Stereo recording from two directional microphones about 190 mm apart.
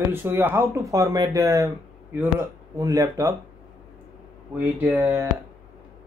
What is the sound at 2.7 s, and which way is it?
Speech, 15° right (ahead or behind).